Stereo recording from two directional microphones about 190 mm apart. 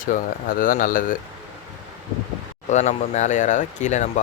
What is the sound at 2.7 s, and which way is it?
Speech, 40° left (ahead or behind).